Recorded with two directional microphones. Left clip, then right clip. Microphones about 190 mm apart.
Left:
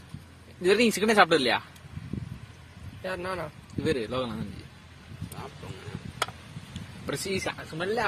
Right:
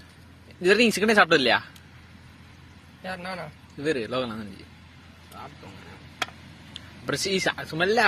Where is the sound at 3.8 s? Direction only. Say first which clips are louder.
Right 2 dB; centre (ahead or behind).